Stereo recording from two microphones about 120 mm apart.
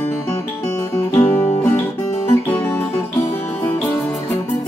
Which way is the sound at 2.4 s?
20° left (ahead or behind).